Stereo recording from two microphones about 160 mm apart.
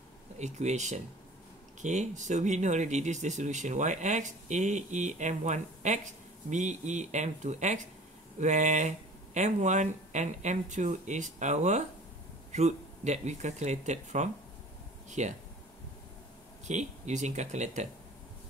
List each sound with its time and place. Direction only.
0.4 s speech: 45° right (ahead or behind)
16.6 s speech: 50° right (ahead or behind)